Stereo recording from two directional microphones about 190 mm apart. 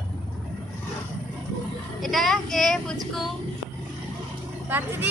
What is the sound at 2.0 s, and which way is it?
Speech, centre (ahead or behind).